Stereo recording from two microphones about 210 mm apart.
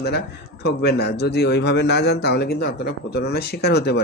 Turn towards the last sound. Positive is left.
turn(degrees=50)  # may be behind; listen again after turning